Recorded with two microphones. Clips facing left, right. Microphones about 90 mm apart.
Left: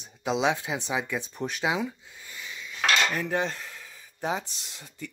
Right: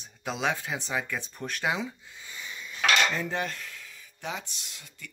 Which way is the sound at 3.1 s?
15° left (ahead or behind).